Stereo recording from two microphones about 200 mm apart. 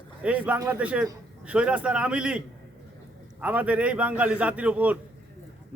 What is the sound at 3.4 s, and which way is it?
A man's voice, 5° right (ahead or behind).